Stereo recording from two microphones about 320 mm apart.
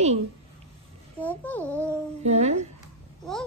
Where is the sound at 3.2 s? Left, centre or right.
Centre.